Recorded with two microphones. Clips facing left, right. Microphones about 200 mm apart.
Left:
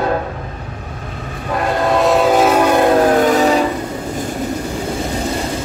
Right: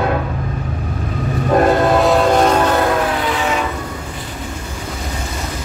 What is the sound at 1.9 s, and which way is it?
Train, centre (ahead or behind).